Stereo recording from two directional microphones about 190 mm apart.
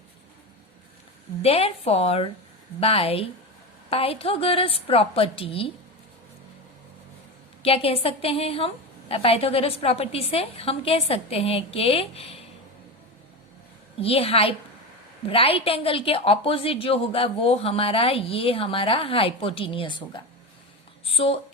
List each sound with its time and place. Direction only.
1.4 s a woman's voice: 30° left (ahead or behind)
7.6 s a woman's voice: 30° left (ahead or behind)
14.0 s a woman's voice: 30° left (ahead or behind)
21.0 s a woman's voice: 30° left (ahead or behind)